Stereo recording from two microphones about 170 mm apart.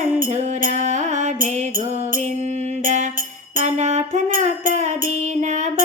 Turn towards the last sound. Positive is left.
turn(degrees=-50)  # may be behind; listen again after turning